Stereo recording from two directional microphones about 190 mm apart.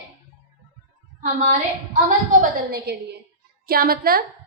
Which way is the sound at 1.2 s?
40° right (ahead or behind).